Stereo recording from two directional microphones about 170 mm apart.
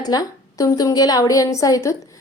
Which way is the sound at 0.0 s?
20° left (ahead or behind).